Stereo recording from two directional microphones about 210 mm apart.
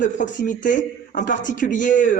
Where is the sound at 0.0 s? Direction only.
35° left (ahead or behind).